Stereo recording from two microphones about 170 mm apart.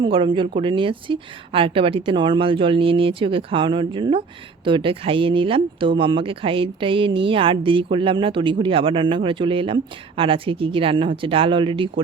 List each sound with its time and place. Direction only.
0.0 s speech: 30° right (ahead or behind)